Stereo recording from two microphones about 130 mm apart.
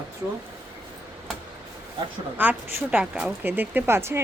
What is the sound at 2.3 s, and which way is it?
A woman's voice, 10° right (ahead or behind).